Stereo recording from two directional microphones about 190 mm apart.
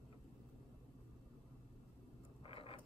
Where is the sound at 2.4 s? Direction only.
30° left (ahead or behind).